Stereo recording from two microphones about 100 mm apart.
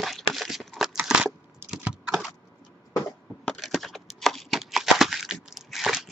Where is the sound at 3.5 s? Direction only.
Centre (ahead or behind).